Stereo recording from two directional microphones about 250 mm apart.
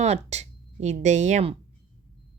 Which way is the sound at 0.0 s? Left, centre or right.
Right.